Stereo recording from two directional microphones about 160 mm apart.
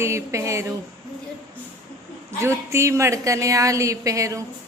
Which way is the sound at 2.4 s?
15° right (ahead or behind).